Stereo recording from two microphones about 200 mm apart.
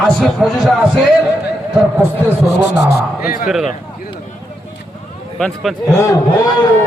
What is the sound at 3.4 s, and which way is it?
Speech, centre (ahead or behind).